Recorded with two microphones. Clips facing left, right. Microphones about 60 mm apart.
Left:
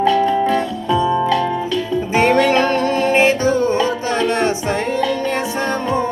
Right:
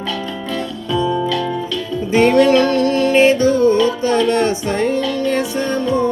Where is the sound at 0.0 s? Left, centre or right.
Left.